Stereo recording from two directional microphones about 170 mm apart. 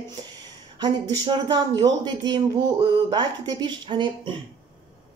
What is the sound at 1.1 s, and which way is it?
Speech, 25° right (ahead or behind).